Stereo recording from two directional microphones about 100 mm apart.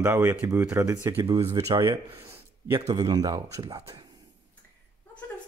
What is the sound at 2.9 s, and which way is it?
Speech, 40° right (ahead or behind).